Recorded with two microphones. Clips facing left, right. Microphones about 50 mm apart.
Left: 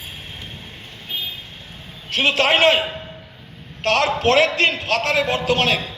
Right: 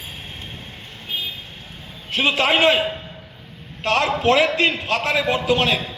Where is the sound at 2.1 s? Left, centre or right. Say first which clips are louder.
Left 1 dB; left.